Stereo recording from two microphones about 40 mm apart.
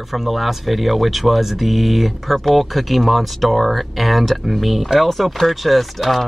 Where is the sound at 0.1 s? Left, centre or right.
Centre.